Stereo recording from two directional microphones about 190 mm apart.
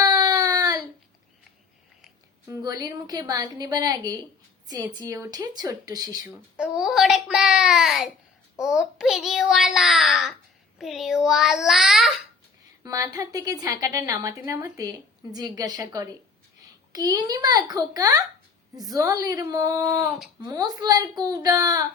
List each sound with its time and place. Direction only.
0.0 s baby cry: 20° right (ahead or behind)
2.5 s a woman's voice: 20° right (ahead or behind)
6.6 s a child's voice: 5° right (ahead or behind)
12.8 s a woman's voice: 20° right (ahead or behind)